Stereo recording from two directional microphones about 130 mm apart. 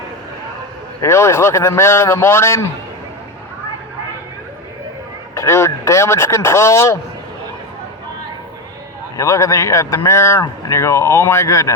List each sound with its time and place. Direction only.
1.0 s speech: 20° left (ahead or behind)
5.3 s speech: 20° left (ahead or behind)
9.1 s speech: 25° left (ahead or behind)